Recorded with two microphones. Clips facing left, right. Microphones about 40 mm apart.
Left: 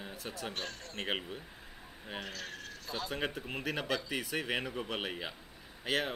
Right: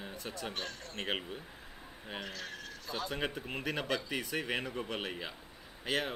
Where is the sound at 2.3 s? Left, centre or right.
Right.